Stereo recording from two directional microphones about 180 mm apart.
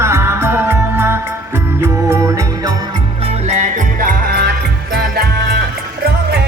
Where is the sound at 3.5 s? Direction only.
45° right (ahead or behind).